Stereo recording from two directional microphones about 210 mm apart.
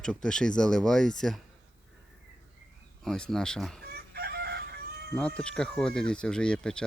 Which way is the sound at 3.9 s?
50° right (ahead or behind).